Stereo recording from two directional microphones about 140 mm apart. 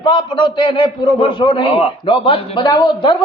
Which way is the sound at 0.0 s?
35° left (ahead or behind).